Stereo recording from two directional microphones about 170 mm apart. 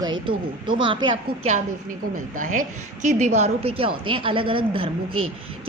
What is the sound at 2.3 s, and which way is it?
A woman's voice, 50° right (ahead or behind).